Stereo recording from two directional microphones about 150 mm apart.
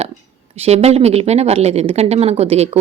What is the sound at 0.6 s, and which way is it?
A woman's voice, 45° right (ahead or behind).